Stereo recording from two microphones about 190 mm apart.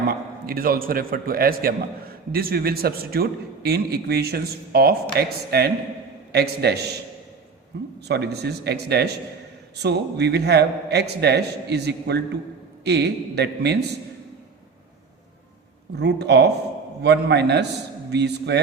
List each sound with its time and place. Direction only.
0.1 s a man's voice: 50° right (ahead or behind)
8.0 s a man's voice: 60° right (ahead or behind)
16.0 s a man's voice: 65° right (ahead or behind)